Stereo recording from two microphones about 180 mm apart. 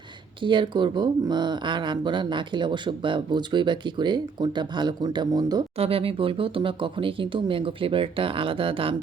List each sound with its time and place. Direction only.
0.4 s speech: 25° right (ahead or behind)